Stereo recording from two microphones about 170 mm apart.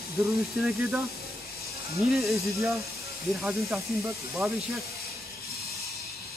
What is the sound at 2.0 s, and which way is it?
Speech, centre (ahead or behind).